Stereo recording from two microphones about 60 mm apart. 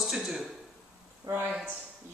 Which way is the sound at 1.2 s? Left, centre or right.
Right.